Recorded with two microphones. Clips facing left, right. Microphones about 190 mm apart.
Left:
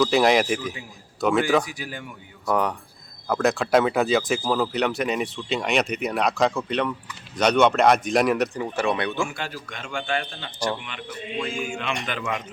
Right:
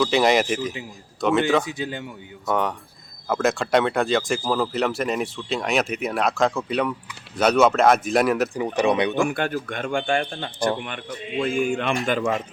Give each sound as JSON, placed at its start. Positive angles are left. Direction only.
{"t": 0.0, "sound": "speech", "side_deg": 0}
{"t": 1.6, "sound": "speech", "side_deg": -25}
{"t": 2.5, "sound": "speech", "side_deg": 0}
{"t": 8.6, "sound": "speech", "side_deg": -20}
{"t": 9.2, "sound": "a man's voice", "side_deg": -55}
{"t": 12.0, "sound": "a man's voice", "side_deg": -45}